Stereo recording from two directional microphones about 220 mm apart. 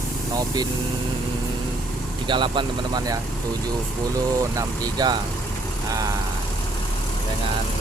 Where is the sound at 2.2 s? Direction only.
20° right (ahead or behind).